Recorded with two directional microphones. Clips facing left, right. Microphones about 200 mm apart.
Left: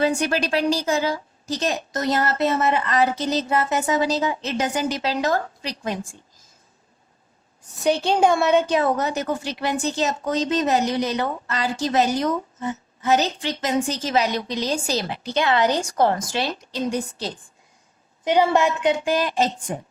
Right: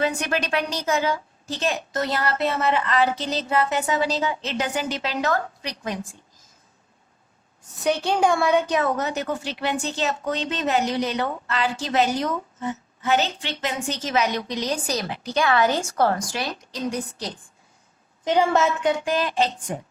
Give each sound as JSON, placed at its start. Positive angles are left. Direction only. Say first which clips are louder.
{"t": 0.0, "sound": "a woman's voice", "louder": "left 3 dB", "side_deg": 35}
{"t": 7.9, "sound": "a woman's voice", "louder": "left 2 dB", "side_deg": 30}
{"t": 13.1, "sound": "a woman's voice", "louder": "left 2 dB", "side_deg": 40}
{"t": 18.3, "sound": "a woman's voice", "louder": "left 1 dB", "side_deg": 15}
{"t": 19.1, "sound": "a woman's voice", "louder": "left 1 dB", "side_deg": 35}